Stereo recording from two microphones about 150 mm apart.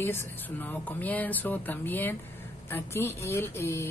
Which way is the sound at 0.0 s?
15° left (ahead or behind).